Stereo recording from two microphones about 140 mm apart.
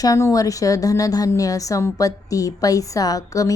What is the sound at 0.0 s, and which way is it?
A woman's voice, 25° left (ahead or behind).